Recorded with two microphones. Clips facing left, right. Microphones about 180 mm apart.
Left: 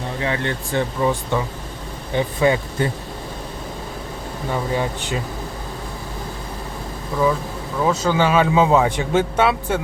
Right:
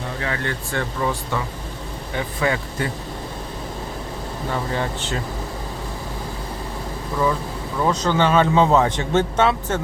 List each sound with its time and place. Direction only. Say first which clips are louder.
0.2 s speech: left 4 dB; 20° left (ahead or behind)
4.5 s speech: left 3 dB; 15° left (ahead or behind)
7.8 s speech: left 1 dB; 10° left (ahead or behind)